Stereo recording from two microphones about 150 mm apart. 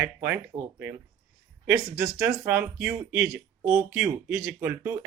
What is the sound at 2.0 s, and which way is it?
Speech, 5° right (ahead or behind).